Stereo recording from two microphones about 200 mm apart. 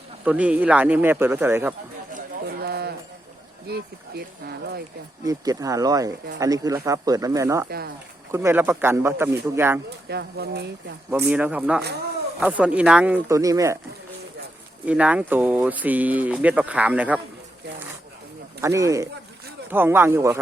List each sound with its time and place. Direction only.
0.3 s speech: 5° right (ahead or behind)
2.1 s a sound: 50° right (ahead or behind)
3.7 s speech: 50° right (ahead or behind)
5.2 s speech: 20° right (ahead or behind)
10.1 s speech: 55° right (ahead or behind)
11.3 s speech: 5° right (ahead or behind)
14.8 s speech: 5° right (ahead or behind)
18.6 s speech: 15° right (ahead or behind)